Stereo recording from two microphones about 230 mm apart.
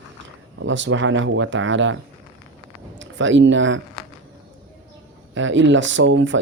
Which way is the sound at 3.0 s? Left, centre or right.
Right.